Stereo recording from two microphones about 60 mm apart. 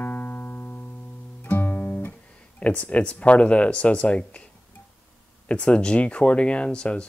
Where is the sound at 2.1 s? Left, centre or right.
Left.